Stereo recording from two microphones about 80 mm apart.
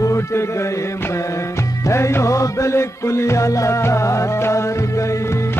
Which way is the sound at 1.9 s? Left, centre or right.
Left.